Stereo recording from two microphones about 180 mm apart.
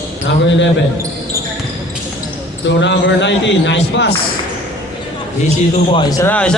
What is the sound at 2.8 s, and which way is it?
A man's voice, 85° left.